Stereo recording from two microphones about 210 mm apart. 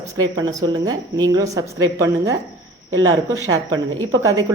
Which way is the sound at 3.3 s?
20° right (ahead or behind).